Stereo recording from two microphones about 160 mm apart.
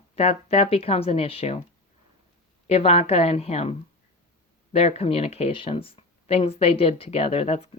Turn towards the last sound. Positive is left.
turn(degrees=35)  # may be behind; listen again after turning